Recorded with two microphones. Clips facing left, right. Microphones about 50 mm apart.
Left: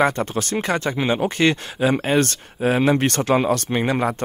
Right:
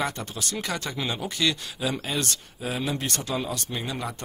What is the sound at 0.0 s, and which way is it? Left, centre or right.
Speech, left.